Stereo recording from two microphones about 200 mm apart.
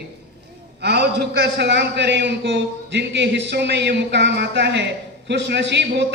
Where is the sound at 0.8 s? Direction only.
55° right (ahead or behind).